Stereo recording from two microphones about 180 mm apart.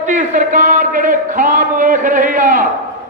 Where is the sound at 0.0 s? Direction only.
45° right (ahead or behind).